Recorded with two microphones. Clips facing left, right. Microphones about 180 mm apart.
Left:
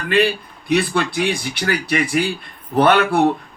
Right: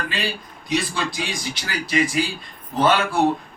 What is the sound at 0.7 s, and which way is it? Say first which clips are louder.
A man's voice: left 6 dB; 60° left (ahead or behind).